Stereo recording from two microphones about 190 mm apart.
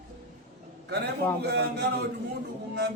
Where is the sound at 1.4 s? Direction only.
60° right (ahead or behind).